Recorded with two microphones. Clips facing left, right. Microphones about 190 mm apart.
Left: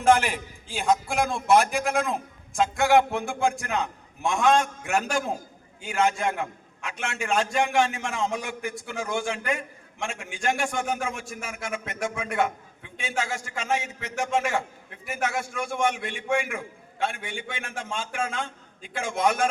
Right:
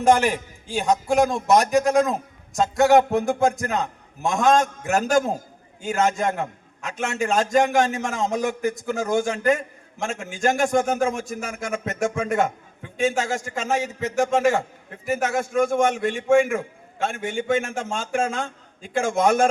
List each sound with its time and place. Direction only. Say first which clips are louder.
0.0 s a man's voice: right 3 dB; 40° right (ahead or behind)